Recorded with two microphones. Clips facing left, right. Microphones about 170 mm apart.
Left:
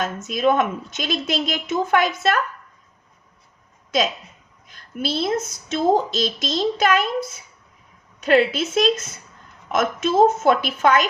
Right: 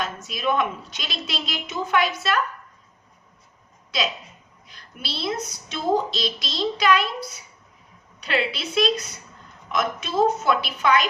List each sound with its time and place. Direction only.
0.0 s a woman's voice: 50° left (ahead or behind)
3.9 s a woman's voice: 45° left (ahead or behind)